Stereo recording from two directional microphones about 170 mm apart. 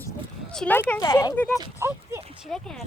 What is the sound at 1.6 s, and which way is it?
Speech, 15° right (ahead or behind).